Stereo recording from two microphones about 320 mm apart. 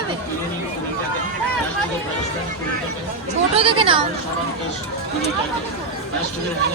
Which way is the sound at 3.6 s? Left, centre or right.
Centre.